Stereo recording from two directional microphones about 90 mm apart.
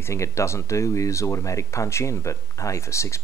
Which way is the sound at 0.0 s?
35° left (ahead or behind).